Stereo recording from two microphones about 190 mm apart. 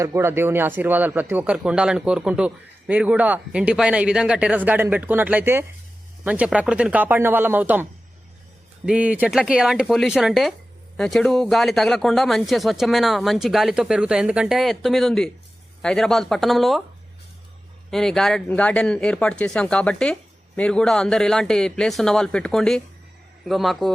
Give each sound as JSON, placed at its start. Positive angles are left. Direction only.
{"t": 0.0, "sound": "speech", "side_deg": -15}
{"t": 8.9, "sound": "speech", "side_deg": -5}
{"t": 17.9, "sound": "speech", "side_deg": 0}